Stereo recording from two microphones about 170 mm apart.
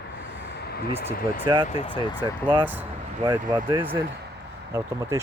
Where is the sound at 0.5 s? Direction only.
70° left (ahead or behind).